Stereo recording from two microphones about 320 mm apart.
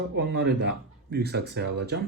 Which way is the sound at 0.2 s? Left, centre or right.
Right.